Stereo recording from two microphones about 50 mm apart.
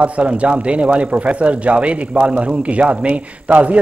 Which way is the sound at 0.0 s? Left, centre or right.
Right.